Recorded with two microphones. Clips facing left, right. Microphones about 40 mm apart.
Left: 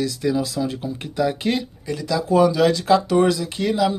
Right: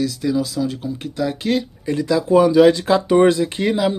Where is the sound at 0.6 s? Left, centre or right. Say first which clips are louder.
Right 2 dB; centre.